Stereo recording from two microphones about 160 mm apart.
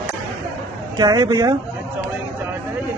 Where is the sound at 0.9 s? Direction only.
25° right (ahead or behind).